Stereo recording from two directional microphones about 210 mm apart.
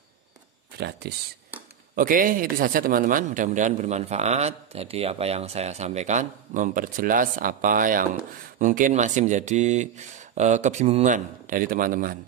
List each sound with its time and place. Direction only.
0.7 s speech: 50° right (ahead or behind)
2.0 s a man's voice: 40° right (ahead or behind)